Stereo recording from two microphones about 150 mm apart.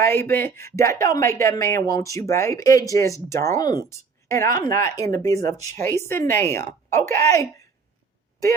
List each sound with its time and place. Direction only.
0.0 s a woman's voice: 15° left (ahead or behind)